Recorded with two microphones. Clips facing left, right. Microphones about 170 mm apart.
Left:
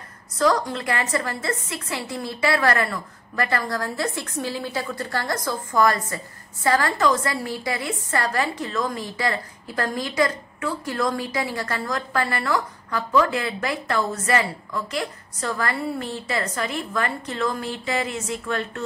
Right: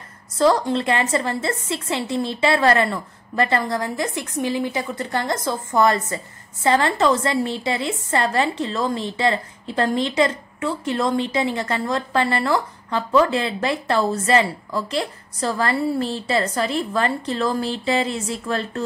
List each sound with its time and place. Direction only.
0.4 s a woman's voice: 30° right (ahead or behind)